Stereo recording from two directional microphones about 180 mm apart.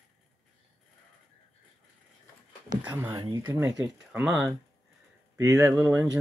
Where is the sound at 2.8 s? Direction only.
10° right (ahead or behind).